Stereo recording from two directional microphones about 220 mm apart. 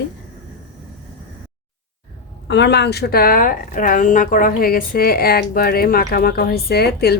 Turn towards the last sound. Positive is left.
turn(degrees=45)  # may be behind; listen again after turning